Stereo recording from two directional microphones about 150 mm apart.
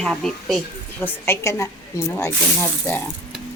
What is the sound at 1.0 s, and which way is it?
Speech, 15° left (ahead or behind).